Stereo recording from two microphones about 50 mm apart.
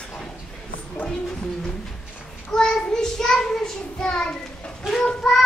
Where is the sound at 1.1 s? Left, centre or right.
Centre.